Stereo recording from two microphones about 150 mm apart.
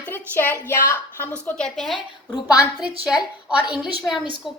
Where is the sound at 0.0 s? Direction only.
15° left (ahead or behind).